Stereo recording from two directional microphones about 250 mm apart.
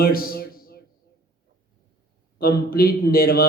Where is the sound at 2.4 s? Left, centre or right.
Left.